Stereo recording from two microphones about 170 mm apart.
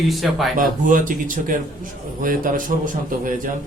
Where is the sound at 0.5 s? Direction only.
50° right (ahead or behind).